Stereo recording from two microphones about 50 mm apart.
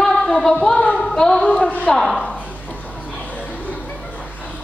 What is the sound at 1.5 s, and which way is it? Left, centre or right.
Speech, left.